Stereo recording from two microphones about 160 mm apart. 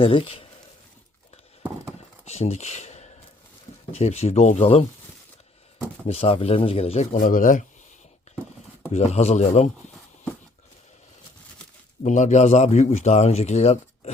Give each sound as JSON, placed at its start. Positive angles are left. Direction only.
{"t": 0.0, "sound": "speech", "side_deg": 35}
{"t": 2.2, "sound": "a man's voice", "side_deg": 45}
{"t": 6.1, "sound": "speech", "side_deg": 35}
{"t": 8.9, "sound": "a man's voice", "side_deg": 45}
{"t": 12.0, "sound": "a man's voice", "side_deg": 50}